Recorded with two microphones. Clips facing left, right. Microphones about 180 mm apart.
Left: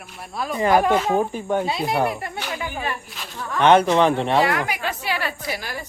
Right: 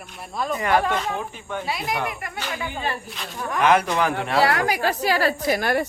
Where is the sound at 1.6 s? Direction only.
25° left (ahead or behind).